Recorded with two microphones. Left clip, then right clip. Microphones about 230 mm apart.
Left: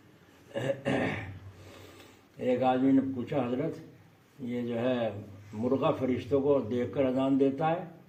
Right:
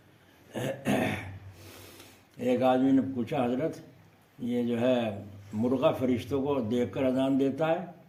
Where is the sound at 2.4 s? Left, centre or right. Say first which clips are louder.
Right 2 dB; right.